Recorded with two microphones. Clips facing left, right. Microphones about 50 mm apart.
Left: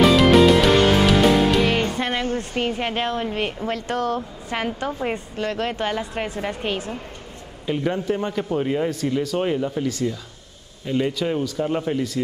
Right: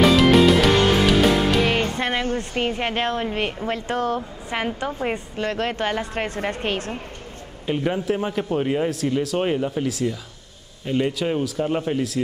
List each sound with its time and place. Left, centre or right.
0.0 s music: centre
2.5 s a man's voice: centre
3.0 s speech: right
4.5 s a woman's voice: centre
5.1 s speech: right
7.6 s a man's voice: centre
9.4 s a man's voice: centre
9.8 s a man's voice: centre